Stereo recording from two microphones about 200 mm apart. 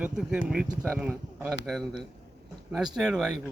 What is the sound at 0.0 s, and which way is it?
Speech, 5° right (ahead or behind).